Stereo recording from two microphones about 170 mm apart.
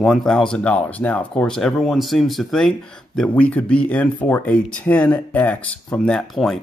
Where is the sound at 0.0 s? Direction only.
Centre (ahead or behind).